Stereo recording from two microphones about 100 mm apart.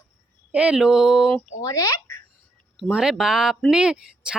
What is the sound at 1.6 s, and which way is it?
Speech, 35° left (ahead or behind).